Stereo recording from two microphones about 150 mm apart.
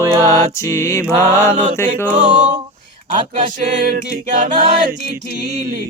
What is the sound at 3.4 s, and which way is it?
Music, 65° right (ahead or behind).